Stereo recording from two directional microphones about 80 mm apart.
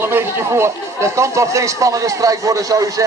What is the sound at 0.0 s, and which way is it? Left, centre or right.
Speech, right.